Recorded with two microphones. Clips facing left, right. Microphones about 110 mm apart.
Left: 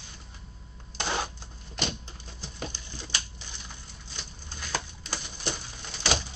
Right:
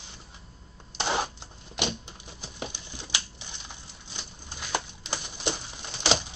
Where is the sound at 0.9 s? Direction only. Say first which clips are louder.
Right 3 dB; 20° right (ahead or behind).